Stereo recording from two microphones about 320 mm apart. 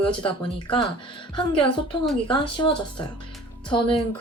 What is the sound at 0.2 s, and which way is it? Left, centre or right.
Speech, centre.